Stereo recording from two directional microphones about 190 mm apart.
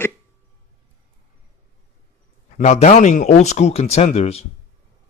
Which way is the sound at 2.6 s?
35° left (ahead or behind).